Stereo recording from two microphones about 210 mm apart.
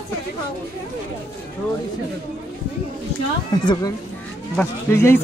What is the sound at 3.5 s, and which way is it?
Speech, 20° left (ahead or behind).